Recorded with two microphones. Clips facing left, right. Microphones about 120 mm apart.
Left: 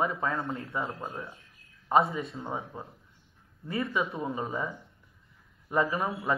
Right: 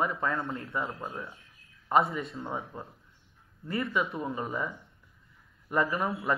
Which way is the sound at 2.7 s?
15° left (ahead or behind).